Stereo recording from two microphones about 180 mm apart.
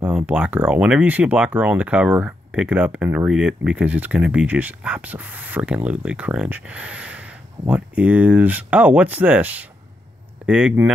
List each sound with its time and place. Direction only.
0.0 s speech: 5° right (ahead or behind)